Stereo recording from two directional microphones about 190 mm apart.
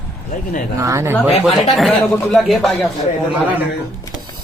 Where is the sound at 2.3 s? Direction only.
Centre (ahead or behind).